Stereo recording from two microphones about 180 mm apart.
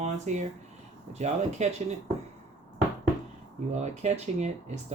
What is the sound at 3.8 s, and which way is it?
Speech, 40° right (ahead or behind).